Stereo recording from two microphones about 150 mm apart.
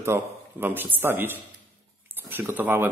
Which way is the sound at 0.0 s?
15° right (ahead or behind).